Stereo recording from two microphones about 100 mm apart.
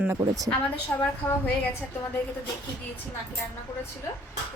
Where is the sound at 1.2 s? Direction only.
20° left (ahead or behind).